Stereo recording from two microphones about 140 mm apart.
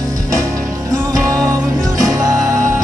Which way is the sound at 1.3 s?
25° right (ahead or behind).